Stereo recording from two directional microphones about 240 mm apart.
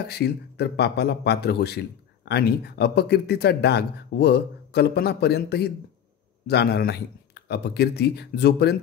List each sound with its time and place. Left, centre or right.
0.1 s speech: left